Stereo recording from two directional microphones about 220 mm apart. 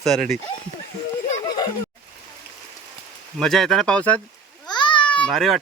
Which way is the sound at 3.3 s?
Centre (ahead or behind).